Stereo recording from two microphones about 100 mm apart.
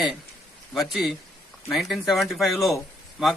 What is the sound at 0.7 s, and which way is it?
A man's voice, centre (ahead or behind).